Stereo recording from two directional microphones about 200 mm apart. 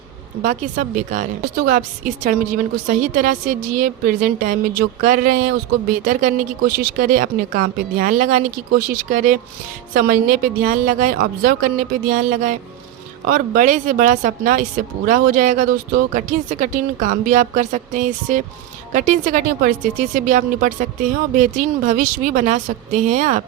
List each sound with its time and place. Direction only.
0.4 s a woman's voice: 40° right (ahead or behind)